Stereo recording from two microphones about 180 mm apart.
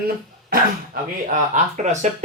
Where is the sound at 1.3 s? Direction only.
40° right (ahead or behind).